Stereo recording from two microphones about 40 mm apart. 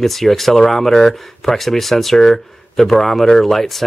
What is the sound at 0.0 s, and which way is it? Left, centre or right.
Speech, centre.